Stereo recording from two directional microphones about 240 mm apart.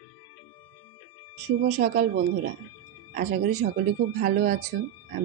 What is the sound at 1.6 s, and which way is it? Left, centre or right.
Speech, right.